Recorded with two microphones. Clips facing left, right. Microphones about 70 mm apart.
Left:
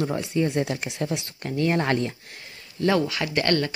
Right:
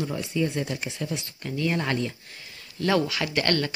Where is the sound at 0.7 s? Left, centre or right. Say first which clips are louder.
Left 3 dB; left.